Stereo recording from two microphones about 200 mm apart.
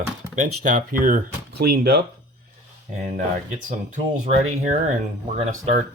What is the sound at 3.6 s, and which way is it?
Speech, 40° right (ahead or behind).